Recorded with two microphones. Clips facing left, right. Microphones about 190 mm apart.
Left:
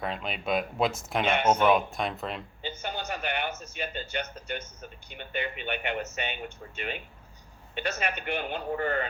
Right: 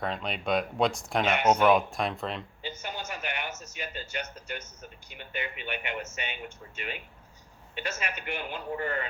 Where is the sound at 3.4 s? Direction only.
60° left (ahead or behind).